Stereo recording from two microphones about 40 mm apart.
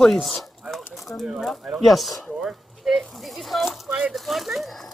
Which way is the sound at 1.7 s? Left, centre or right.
Centre.